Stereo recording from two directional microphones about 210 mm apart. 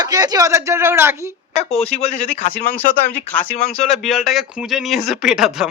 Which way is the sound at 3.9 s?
Centre (ahead or behind).